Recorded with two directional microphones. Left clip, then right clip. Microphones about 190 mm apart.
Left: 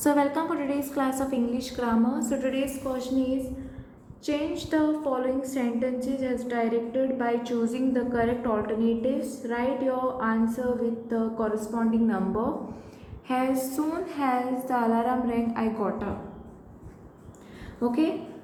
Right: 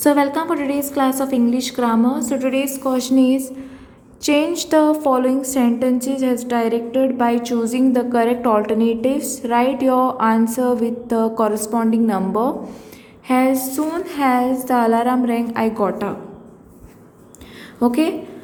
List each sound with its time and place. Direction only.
0.0 s a woman's voice: 25° right (ahead or behind)
17.7 s a woman's voice: 45° right (ahead or behind)